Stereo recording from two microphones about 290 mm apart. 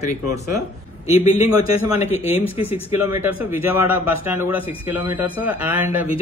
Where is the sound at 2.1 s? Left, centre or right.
Centre.